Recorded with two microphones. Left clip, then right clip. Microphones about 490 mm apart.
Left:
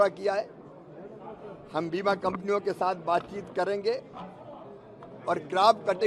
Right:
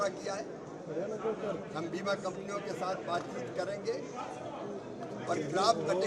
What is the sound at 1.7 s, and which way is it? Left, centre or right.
A man's voice, left.